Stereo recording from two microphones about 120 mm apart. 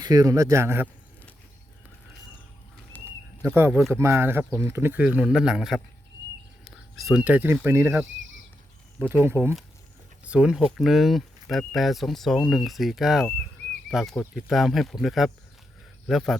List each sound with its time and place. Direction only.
0.0 s speech: 30° right (ahead or behind)
2.9 s a sound: 15° left (ahead or behind)
3.4 s speech: 15° right (ahead or behind)
10.2 s speech: 10° right (ahead or behind)